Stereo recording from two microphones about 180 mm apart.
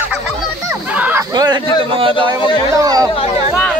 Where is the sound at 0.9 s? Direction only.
10° right (ahead or behind).